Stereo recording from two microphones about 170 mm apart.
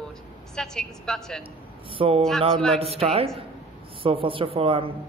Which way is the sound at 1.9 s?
35° right (ahead or behind).